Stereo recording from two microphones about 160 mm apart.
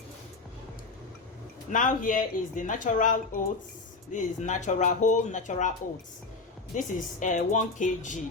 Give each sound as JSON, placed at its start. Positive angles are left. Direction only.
{"t": 1.7, "sound": "speech", "side_deg": 55}
{"t": 6.7, "sound": "speech", "side_deg": 55}